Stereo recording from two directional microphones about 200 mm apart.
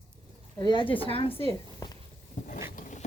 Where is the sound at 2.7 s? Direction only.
40° left (ahead or behind).